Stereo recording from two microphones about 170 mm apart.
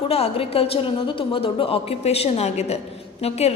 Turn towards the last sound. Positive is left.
turn(degrees=35)  # may be behind; listen again after turning